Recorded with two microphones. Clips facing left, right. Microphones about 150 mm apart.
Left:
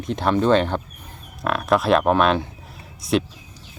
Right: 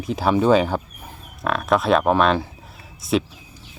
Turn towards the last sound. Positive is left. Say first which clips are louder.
# even
turn(degrees=0)  # may be behind; listen again after turning